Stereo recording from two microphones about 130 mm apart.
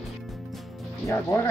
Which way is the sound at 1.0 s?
20° left (ahead or behind).